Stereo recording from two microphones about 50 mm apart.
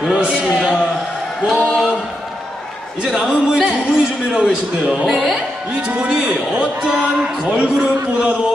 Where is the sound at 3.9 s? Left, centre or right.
Centre.